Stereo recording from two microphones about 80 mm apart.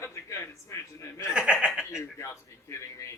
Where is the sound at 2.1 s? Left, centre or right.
Left.